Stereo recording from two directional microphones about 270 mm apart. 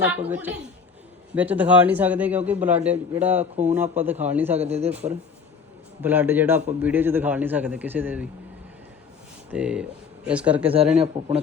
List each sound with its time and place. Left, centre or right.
0.0 s a man's voice: centre
4.6 s speech: right
4.9 s a man's voice: centre
9.5 s a man's voice: centre